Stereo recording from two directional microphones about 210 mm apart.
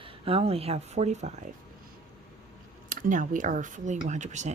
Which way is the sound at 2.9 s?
40° right (ahead or behind).